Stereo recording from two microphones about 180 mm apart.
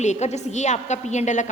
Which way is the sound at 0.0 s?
40° left (ahead or behind).